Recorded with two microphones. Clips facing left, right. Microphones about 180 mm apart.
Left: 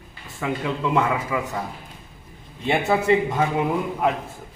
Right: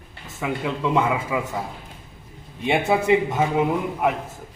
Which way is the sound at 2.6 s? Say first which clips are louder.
Right 1 dB; 10° right (ahead or behind).